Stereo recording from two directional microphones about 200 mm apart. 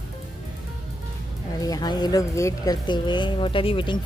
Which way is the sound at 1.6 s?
20° left (ahead or behind).